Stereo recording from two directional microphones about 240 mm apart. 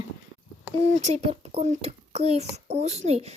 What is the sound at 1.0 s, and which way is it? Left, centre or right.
A child's voice, right.